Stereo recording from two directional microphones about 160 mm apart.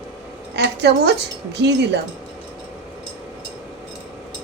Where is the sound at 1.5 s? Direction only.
90° right.